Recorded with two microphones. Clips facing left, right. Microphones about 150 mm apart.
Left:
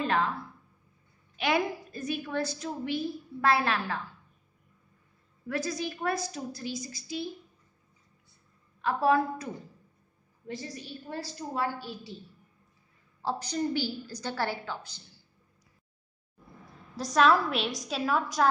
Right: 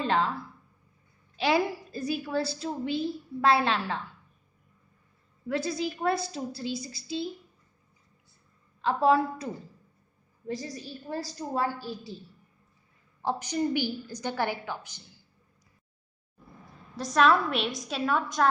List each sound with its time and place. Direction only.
0.0 s a woman's voice: 30° right (ahead or behind)
1.3 s a woman's voice: 30° right (ahead or behind)
5.5 s a woman's voice: 25° right (ahead or behind)
8.8 s a woman's voice: 25° right (ahead or behind)
10.4 s a woman's voice: 40° right (ahead or behind)
13.2 s a woman's voice: 15° right (ahead or behind)
16.9 s a woman's voice: centre (ahead or behind)